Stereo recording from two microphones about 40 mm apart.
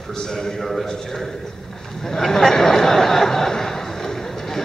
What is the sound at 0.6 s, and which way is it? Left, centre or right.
Speech, centre.